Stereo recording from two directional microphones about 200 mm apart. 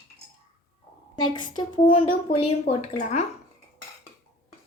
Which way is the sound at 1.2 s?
20° left (ahead or behind).